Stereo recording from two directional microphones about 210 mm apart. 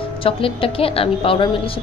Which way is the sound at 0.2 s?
25° left (ahead or behind).